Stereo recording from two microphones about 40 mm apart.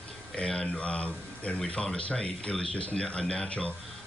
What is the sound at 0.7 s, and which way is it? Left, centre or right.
Speech, left.